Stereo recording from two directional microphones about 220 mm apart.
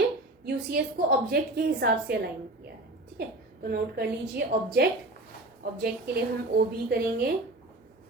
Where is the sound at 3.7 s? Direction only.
45° right (ahead or behind).